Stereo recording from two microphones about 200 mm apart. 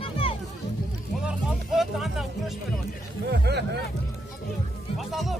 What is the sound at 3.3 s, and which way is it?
Speech, 55° right (ahead or behind).